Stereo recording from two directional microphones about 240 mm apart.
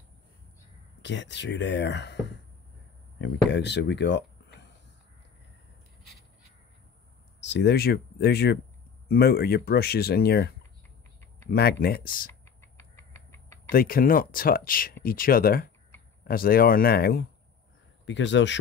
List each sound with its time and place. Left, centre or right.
1.0 s speech: left
3.2 s speech: left
7.3 s speech: left
11.5 s speech: left
12.7 s a sound: centre
13.7 s speech: left